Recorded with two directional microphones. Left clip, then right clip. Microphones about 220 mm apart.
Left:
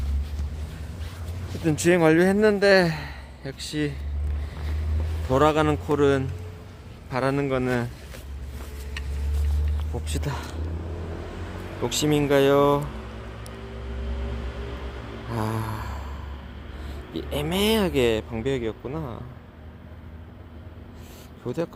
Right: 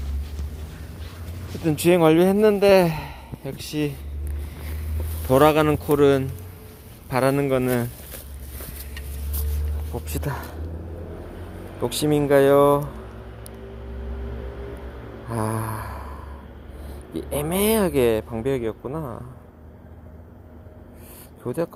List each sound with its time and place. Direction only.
1.6 s a man's voice: 20° right (ahead or behind)
5.3 s speech: 25° right (ahead or behind)
9.9 s speech: 15° right (ahead or behind)
12.0 s a man's voice: 10° right (ahead or behind)
15.3 s a sound: 15° right (ahead or behind)
17.2 s a man's voice: 10° right (ahead or behind)
21.4 s a man's voice: 15° right (ahead or behind)